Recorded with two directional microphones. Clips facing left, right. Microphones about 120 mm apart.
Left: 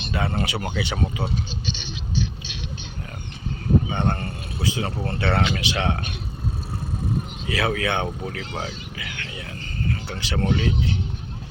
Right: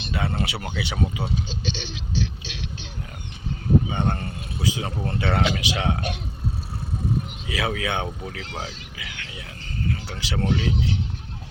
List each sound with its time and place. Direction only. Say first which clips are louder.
0.1 s speech: left 2 dB; centre (ahead or behind)
1.6 s a sound: right 1 dB; 90° right
3.8 s a man's voice: left 1 dB; centre (ahead or behind)
7.4 s speech: left 4 dB; 10° right (ahead or behind)
8.5 s a sound: left 3 dB; 5° right (ahead or behind)
9.8 s speech: left 1 dB; 5° right (ahead or behind)